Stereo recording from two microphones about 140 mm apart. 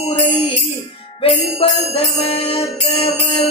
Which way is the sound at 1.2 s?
45° left (ahead or behind).